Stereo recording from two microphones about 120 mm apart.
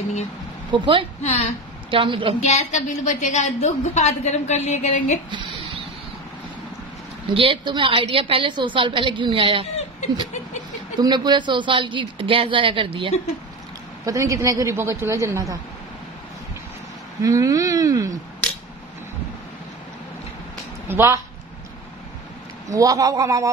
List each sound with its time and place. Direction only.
0.7 s a woman's voice: 45° right (ahead or behind)
1.2 s a woman's voice: 65° left (ahead or behind)
1.9 s a woman's voice: 45° right (ahead or behind)
2.4 s a woman's voice: 75° left (ahead or behind); by 5.2 s 90° left
7.2 s a woman's voice: 45° right (ahead or behind)
9.9 s a sound: 90° left
11.0 s a woman's voice: 35° right (ahead or behind)
14.0 s a woman's voice: 25° right (ahead or behind)
17.2 s a woman's voice: 30° right (ahead or behind)
20.9 s a woman's voice: 20° right (ahead or behind)
22.7 s a woman's voice: 30° right (ahead or behind)